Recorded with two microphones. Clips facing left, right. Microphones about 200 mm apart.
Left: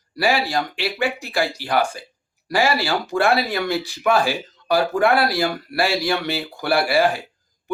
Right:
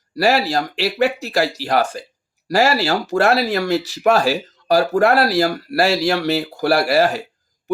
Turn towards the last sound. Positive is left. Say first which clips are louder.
# right 3 dB
turn(degrees=-45)  # may be behind; listen again after turning